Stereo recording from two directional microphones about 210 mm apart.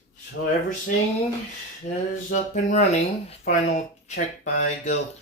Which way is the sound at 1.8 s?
35° left (ahead or behind).